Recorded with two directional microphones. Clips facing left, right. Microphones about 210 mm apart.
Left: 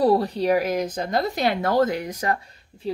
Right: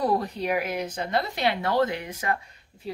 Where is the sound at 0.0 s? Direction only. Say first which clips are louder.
Left 6 dB; 35° left (ahead or behind).